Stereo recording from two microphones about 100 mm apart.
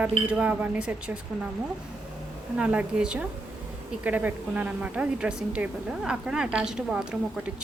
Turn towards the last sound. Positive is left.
turn(degrees=-10)  # may be behind; listen again after turning